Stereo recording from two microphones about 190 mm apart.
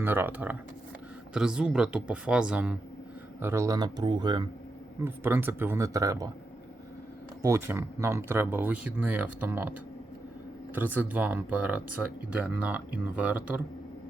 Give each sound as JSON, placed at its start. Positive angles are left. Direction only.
{"t": 0.0, "sound": "speech", "side_deg": -10}
{"t": 5.0, "sound": "speech", "side_deg": -10}
{"t": 7.4, "sound": "speech", "side_deg": -15}
{"t": 10.8, "sound": "speech", "side_deg": -10}